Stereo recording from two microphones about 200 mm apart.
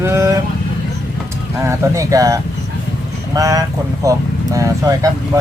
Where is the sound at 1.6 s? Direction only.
15° right (ahead or behind).